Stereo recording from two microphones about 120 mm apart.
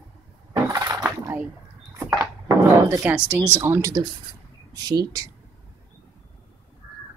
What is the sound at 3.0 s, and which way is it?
Speech, 15° right (ahead or behind).